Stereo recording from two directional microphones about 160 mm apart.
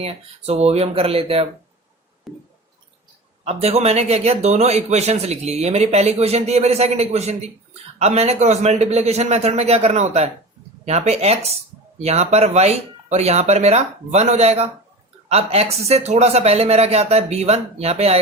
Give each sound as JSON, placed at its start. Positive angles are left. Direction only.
{"t": 0.0, "sound": "speech", "side_deg": -40}
{"t": 2.3, "sound": "squish", "side_deg": 0}
{"t": 3.4, "sound": "speech", "side_deg": -40}